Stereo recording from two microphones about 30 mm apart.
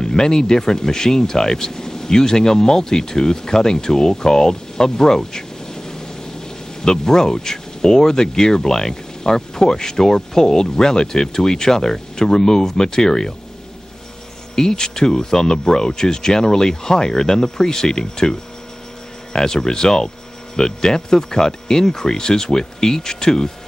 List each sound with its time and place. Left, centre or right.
0.0 s speech: left
14.5 s speech: centre